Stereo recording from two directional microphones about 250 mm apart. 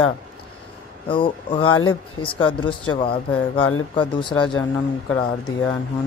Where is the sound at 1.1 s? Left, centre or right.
Centre.